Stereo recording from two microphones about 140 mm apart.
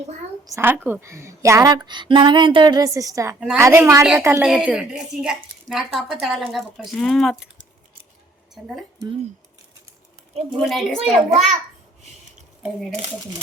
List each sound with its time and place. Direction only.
0.4 s speech: 20° right (ahead or behind)
4.4 s speech: 5° right (ahead or behind)
10.7 s speech: centre (ahead or behind)